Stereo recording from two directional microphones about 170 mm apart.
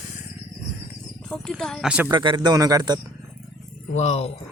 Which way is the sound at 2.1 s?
25° right (ahead or behind).